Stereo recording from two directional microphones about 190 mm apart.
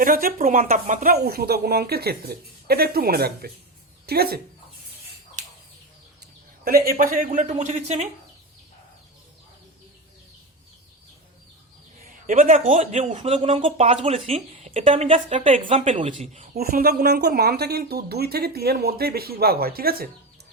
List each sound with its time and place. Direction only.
0.0 s a woman's voice: 50° right (ahead or behind)
6.7 s speech: 50° right (ahead or behind)
12.2 s speech: 45° right (ahead or behind)
16.6 s speech: 55° right (ahead or behind)